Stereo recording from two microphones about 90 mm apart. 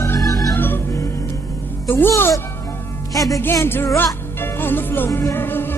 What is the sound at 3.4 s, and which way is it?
Music, 30° left (ahead or behind).